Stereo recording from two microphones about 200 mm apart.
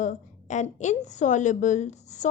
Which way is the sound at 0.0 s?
40° left (ahead or behind).